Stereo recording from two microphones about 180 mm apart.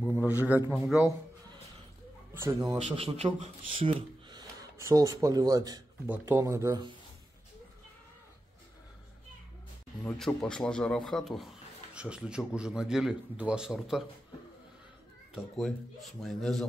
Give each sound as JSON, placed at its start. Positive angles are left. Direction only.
{"t": 0.2, "sound": "a man's voice", "side_deg": -10}
{"t": 2.3, "sound": "a man's voice", "side_deg": -15}
{"t": 2.8, "sound": "a man's voice", "side_deg": -35}
{"t": 10.0, "sound": "a man's voice", "side_deg": 5}
{"t": 15.3, "sound": "a man's voice", "side_deg": 0}